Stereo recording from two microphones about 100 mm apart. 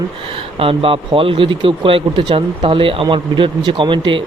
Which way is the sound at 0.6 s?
65° right (ahead or behind).